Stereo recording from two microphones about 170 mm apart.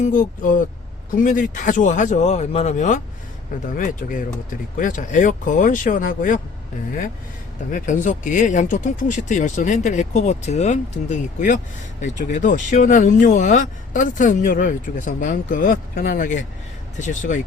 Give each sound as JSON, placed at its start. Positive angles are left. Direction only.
{"t": 0.0, "sound": "speech", "side_deg": 50}
{"t": 4.8, "sound": "speech", "side_deg": 50}
{"t": 7.7, "sound": "speech", "side_deg": 50}